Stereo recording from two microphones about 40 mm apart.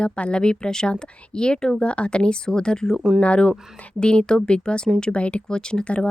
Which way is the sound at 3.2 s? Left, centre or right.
Left.